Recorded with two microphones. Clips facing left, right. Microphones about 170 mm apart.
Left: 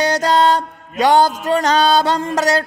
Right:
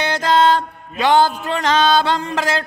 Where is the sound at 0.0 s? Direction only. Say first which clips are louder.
Left 1 dB; 40° left (ahead or behind).